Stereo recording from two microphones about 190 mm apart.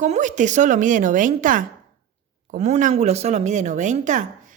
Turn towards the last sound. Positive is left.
turn(degrees=-40)  # may be behind; listen again after turning